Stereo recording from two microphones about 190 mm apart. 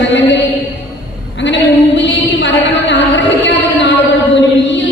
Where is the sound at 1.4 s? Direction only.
70° left (ahead or behind).